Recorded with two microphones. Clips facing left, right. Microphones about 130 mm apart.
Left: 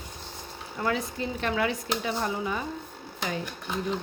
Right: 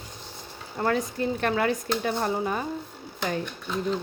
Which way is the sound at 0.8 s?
45° right (ahead or behind).